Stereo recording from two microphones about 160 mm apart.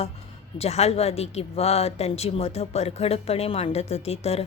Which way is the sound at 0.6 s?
40° left (ahead or behind).